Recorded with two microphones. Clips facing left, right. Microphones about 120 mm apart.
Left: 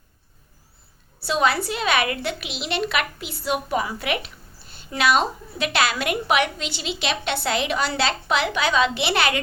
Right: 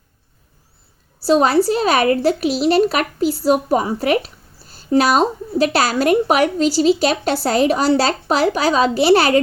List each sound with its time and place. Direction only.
1.2 s a woman's voice: 35° right (ahead or behind)